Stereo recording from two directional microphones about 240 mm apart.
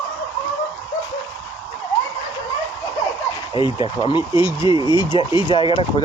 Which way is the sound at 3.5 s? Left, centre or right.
Left.